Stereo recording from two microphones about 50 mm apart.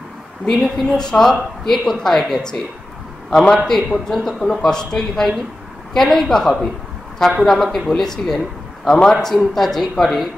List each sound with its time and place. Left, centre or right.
0.5 s a man's voice: centre